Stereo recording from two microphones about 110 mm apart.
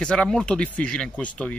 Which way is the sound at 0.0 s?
5° left (ahead or behind).